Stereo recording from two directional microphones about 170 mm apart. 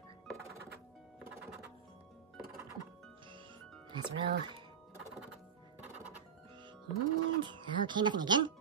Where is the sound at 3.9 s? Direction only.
30° right (ahead or behind).